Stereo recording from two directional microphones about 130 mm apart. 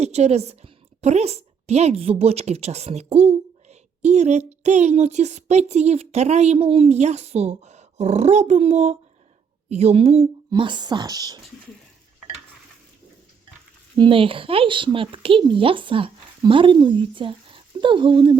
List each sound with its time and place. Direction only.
0.0 s a woman's voice: 55° right (ahead or behind)
10.5 s speech: 35° right (ahead or behind)
14.0 s speech: 45° right (ahead or behind)